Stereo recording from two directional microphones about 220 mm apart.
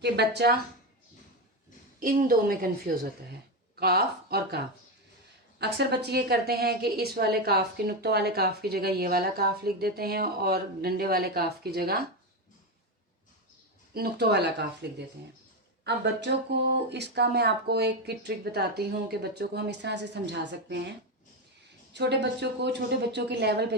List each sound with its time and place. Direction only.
0.0 s a woman's voice: 50° right (ahead or behind)
2.0 s a woman's voice: 40° right (ahead or behind)
13.9 s a woman's voice: 45° right (ahead or behind)
21.9 s a woman's voice: 50° right (ahead or behind)